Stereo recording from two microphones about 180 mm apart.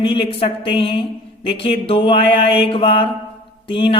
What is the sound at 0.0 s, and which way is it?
Mantra, 30° left (ahead or behind).